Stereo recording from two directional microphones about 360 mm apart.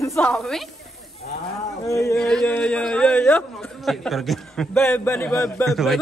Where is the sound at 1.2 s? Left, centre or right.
Left.